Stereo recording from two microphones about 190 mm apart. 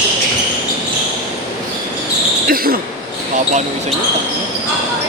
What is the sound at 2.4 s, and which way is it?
Cricket, 50° right (ahead or behind).